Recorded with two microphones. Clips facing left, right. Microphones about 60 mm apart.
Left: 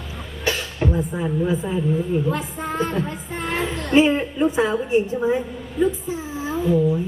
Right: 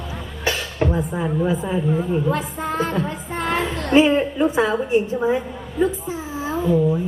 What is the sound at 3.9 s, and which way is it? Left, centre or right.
A woman's voice, right.